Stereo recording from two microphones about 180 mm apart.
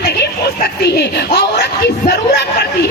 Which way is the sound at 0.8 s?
65° left (ahead or behind).